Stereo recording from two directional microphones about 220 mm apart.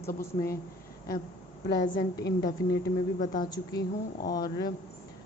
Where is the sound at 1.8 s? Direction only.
45° left (ahead or behind).